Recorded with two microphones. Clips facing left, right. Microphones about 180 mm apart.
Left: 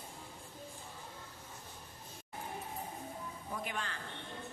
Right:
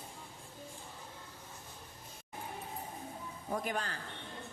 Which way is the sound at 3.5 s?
45° right (ahead or behind).